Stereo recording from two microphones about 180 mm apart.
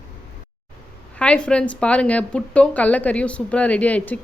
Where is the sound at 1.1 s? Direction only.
5° left (ahead or behind).